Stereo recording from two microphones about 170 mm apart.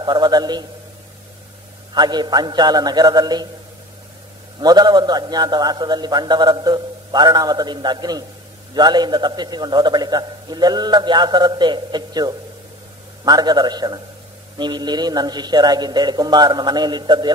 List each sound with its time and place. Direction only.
0.0 s a man's voice: 25° right (ahead or behind)
2.0 s a man's voice: 25° right (ahead or behind)
4.6 s a man's voice: 25° right (ahead or behind)